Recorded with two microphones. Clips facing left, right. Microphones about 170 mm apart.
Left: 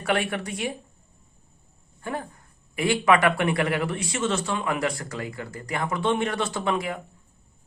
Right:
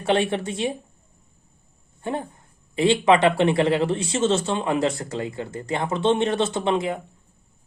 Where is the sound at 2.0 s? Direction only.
25° right (ahead or behind).